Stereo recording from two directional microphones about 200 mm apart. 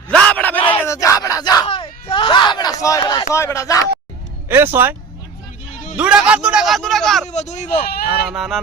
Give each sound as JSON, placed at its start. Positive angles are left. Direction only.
{"t": 0.1, "sound": "bellow", "side_deg": 5}
{"t": 0.7, "sound": "a sound", "side_deg": 10}
{"t": 2.8, "sound": "speech", "side_deg": 20}
{"t": 4.4, "sound": "speech", "side_deg": -10}
{"t": 6.0, "sound": "a man's voice", "side_deg": -5}
{"t": 7.3, "sound": "speech", "side_deg": 35}
{"t": 7.9, "sound": "a sound", "side_deg": 50}
{"t": 8.3, "sound": "a man's voice", "side_deg": 0}